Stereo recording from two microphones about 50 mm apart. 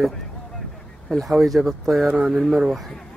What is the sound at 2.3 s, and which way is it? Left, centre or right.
Speech, centre.